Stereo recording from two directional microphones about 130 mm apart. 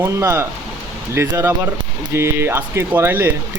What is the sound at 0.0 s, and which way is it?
Speech, 20° right (ahead or behind).